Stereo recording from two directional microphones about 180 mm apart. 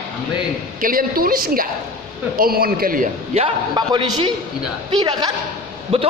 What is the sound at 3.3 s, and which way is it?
A man's voice, 30° right (ahead or behind).